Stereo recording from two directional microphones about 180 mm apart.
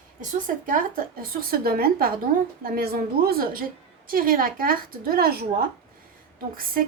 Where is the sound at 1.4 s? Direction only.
55° right (ahead or behind).